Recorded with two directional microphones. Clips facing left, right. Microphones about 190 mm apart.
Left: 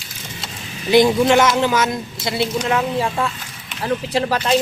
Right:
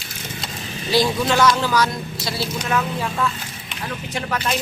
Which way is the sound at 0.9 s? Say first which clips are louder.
Left 6 dB; 20° left (ahead or behind).